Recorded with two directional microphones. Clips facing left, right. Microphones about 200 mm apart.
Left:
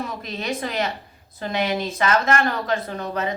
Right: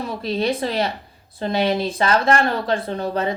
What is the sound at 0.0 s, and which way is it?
Speech, 30° right (ahead or behind).